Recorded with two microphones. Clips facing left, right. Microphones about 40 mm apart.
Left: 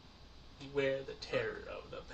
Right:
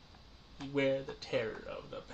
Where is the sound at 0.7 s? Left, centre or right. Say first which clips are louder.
Right 2 dB; right.